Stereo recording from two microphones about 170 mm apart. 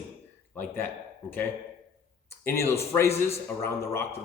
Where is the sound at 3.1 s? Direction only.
35° left (ahead or behind).